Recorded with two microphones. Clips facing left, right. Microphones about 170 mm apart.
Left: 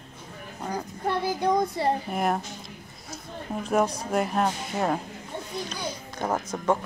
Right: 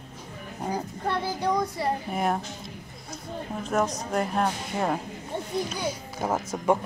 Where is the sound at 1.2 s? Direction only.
15° left (ahead or behind).